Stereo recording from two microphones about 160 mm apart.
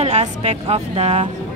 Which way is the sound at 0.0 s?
45° right (ahead or behind).